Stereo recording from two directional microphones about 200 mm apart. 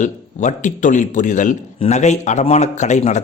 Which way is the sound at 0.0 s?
35° left (ahead or behind).